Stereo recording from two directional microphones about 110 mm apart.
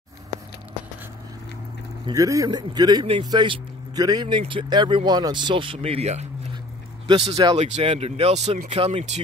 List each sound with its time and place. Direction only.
2.1 s a man's voice: 30° right (ahead or behind)
4.4 s speech: 50° right (ahead or behind)
5.8 s speech: 70° right (ahead or behind)
7.1 s speech: 45° right (ahead or behind)
7.5 s speech: 90° right
7.8 s speech: 65° right (ahead or behind); by 9.2 s 80° right